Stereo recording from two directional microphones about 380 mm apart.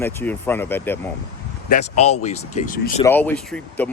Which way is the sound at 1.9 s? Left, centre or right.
Centre.